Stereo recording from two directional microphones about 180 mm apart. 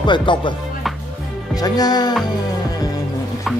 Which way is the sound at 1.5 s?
20° left (ahead or behind).